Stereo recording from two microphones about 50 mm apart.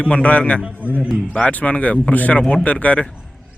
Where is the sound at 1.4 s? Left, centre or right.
Left.